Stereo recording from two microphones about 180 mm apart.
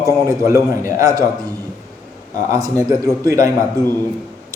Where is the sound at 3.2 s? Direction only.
15° right (ahead or behind).